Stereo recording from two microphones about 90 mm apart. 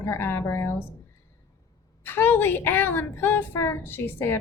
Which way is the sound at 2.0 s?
25° left (ahead or behind).